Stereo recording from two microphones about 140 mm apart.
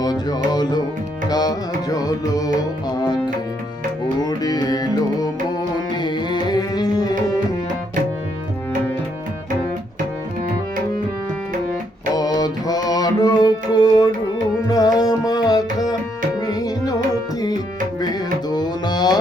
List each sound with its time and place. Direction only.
0.0 s music: 30° left (ahead or behind)
4.2 s music: 30° left (ahead or behind)
6.0 s tabla: 35° left (ahead or behind)
12.1 s music: 30° left (ahead or behind)
16.4 s tabla: 30° left (ahead or behind)
18.0 s music: 30° left (ahead or behind)